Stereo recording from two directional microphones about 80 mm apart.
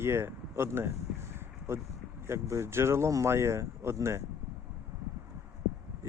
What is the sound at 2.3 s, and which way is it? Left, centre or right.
Speech, right.